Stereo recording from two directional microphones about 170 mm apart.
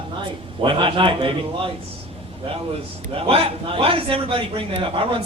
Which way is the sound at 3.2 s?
35° right (ahead or behind).